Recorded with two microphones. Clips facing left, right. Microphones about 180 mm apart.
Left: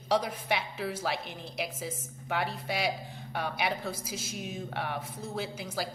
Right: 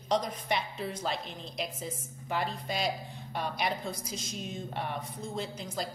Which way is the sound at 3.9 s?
5° left (ahead or behind).